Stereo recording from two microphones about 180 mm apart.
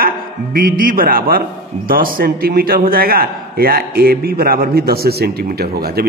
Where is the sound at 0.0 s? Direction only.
55° right (ahead or behind).